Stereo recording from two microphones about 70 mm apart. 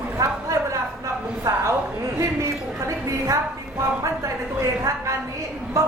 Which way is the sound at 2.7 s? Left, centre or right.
Right.